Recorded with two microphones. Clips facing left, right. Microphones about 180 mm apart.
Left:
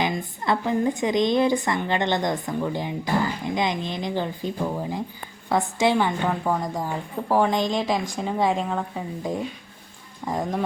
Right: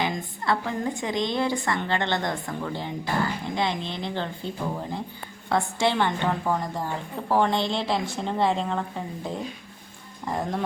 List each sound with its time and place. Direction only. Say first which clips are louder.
0.0 s a woman's voice: left 2 dB; 15° left (ahead or behind)
10.2 s a woman's voice: left 2 dB; 10° left (ahead or behind)